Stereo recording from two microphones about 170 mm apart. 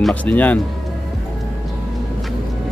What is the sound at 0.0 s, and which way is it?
Speech, 10° left (ahead or behind).